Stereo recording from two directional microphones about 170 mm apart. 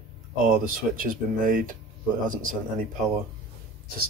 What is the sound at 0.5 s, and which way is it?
Speech, 55° right (ahead or behind).